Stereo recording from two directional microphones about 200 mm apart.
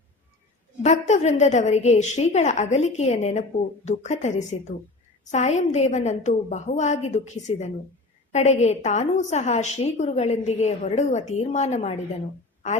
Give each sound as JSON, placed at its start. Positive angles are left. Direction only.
{"t": 0.8, "sound": "a woman's voice", "side_deg": 35}